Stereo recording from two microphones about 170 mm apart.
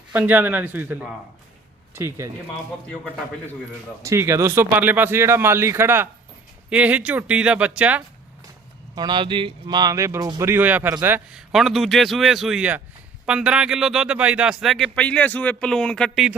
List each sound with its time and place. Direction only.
0.1 s speech: 10° right (ahead or behind)
4.0 s speech: 15° right (ahead or behind)
9.0 s speech: 25° right (ahead or behind); by 16.4 s 5° right (ahead or behind)